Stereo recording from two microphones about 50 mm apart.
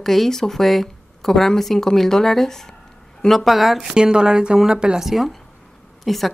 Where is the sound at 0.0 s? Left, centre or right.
Centre.